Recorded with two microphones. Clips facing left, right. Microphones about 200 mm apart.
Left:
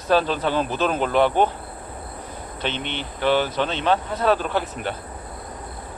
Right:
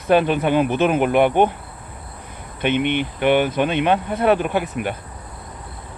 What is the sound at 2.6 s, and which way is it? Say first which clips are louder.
Speech: right 9 dB; 15° right (ahead or behind).